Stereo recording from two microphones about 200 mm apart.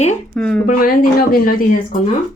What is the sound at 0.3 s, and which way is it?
Speech, 5° left (ahead or behind).